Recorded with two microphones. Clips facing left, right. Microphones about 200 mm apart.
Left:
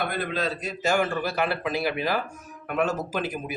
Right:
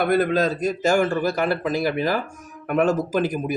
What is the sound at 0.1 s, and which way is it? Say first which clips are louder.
Speech: right 9 dB; 45° right (ahead or behind).